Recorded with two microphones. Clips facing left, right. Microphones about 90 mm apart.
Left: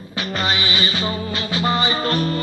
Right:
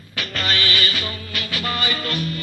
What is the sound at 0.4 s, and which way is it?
Music, 20° left (ahead or behind).